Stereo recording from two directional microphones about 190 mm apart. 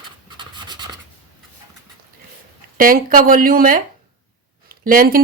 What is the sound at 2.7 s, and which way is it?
Speech, 45° right (ahead or behind).